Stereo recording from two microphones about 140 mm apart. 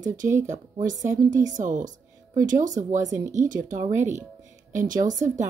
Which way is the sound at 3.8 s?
20° right (ahead or behind).